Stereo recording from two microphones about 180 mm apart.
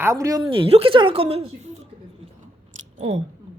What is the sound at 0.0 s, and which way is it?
Speech, 15° right (ahead or behind).